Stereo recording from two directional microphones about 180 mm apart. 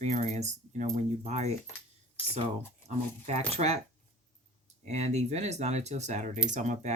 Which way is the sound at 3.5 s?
35° right (ahead or behind).